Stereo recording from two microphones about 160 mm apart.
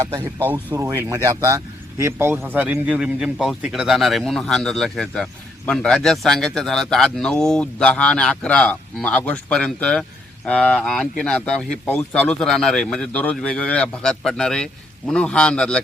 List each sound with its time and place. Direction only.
0.0 s speech: 15° right (ahead or behind); by 15.8 s 5° left (ahead or behind)